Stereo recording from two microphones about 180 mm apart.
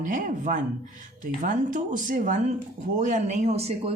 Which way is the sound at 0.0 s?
45° right (ahead or behind).